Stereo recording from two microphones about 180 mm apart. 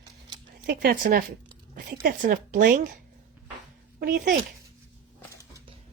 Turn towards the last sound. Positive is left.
turn(degrees=-55)  # may be behind; listen again after turning